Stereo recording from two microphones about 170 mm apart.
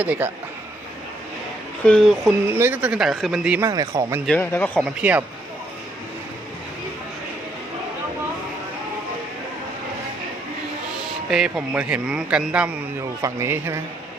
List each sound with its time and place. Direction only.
0.0 s speech: 10° right (ahead or behind)
1.8 s speech: 5° left (ahead or behind)
2.5 s speech: 15° right (ahead or behind)
3.6 s a man's voice: 20° right (ahead or behind)
4.3 s speech: 10° left (ahead or behind)
4.8 s speech: 5° right (ahead or behind)
11.3 s speech: 5° right (ahead or behind)